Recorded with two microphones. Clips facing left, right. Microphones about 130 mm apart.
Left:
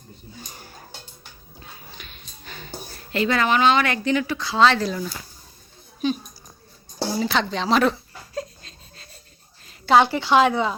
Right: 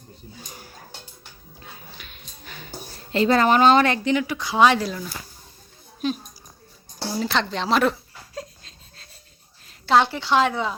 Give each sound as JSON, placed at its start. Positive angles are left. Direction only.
{"t": 0.3, "sound": "a sound", "side_deg": -5}
{"t": 1.5, "sound": "dog", "side_deg": -5}
{"t": 2.9, "sound": "speech", "side_deg": -30}
{"t": 4.0, "sound": "speech", "side_deg": -15}
{"t": 4.9, "sound": "speech", "side_deg": 0}
{"t": 6.0, "sound": "a sound", "side_deg": 0}
{"t": 7.2, "sound": "speech", "side_deg": 0}
{"t": 8.4, "sound": "a sound", "side_deg": 0}
{"t": 9.6, "sound": "a woman's voice", "side_deg": 0}